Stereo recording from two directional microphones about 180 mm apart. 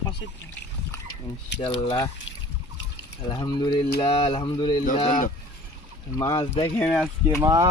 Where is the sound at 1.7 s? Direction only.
25° left (ahead or behind).